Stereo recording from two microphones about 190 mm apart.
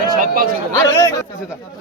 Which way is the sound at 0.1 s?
50° right (ahead or behind).